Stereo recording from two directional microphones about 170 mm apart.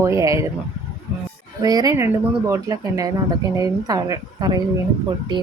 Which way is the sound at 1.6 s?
20° right (ahead or behind).